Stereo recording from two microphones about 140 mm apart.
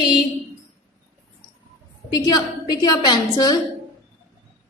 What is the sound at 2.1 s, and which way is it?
A woman's voice, 25° left (ahead or behind).